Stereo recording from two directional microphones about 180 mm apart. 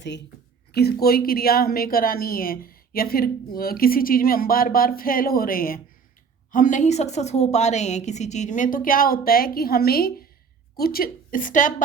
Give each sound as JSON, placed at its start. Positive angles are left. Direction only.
{"t": 0.7, "sound": "a woman's voice", "side_deg": 60}